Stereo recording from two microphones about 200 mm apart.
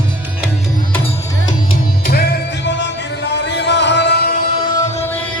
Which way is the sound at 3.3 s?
60° left (ahead or behind).